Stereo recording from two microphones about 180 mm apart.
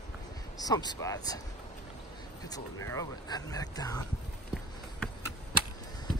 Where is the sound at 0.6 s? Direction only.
20° left (ahead or behind).